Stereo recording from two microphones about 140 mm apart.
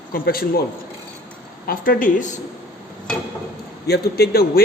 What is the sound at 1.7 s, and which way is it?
Speech, 80° left.